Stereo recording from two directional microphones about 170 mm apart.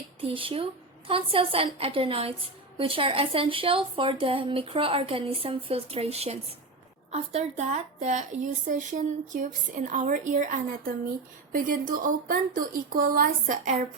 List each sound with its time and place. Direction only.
0.2 s a woman's voice: 35° right (ahead or behind); by 13.7 s 55° right (ahead or behind)